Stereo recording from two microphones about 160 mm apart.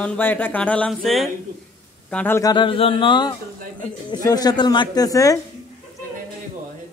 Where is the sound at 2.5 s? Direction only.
30° left (ahead or behind).